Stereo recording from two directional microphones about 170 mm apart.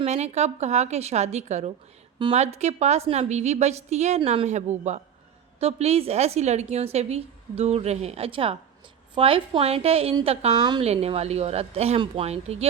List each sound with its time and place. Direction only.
0.0 s a woman's voice: 40° right (ahead or behind)